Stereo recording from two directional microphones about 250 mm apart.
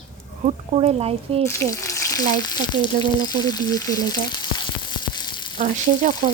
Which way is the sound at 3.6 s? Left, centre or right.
Centre.